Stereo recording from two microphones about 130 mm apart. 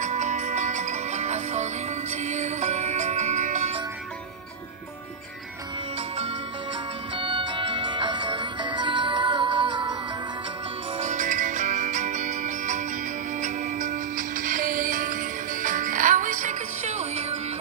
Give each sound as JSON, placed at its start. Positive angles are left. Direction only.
{"t": 0.0, "sound": "music", "side_deg": -65}
{"t": 7.2, "sound": "music", "side_deg": -40}
{"t": 11.0, "sound": "music", "side_deg": -70}